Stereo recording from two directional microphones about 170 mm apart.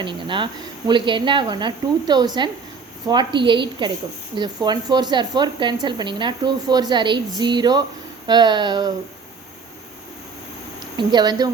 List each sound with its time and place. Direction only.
0.0 s a woman's voice: 30° right (ahead or behind)
10.9 s a woman's voice: 25° right (ahead or behind)